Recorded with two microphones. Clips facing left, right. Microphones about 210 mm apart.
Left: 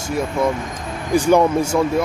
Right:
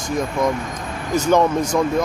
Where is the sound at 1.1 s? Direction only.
10° left (ahead or behind).